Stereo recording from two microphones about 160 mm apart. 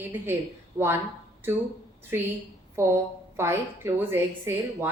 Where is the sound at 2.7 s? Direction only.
20° right (ahead or behind).